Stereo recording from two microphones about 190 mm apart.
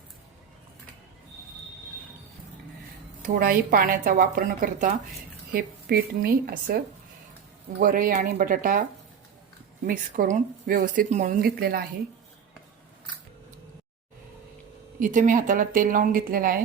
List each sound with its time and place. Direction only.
3.2 s speech: 50° right (ahead or behind)
9.8 s speech: 45° right (ahead or behind)
14.9 s speech: 45° right (ahead or behind)